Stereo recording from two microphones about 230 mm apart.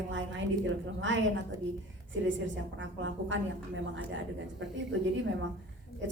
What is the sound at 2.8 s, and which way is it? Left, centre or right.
Speech, right.